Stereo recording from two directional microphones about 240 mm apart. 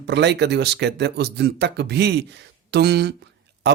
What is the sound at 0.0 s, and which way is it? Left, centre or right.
Speech, right.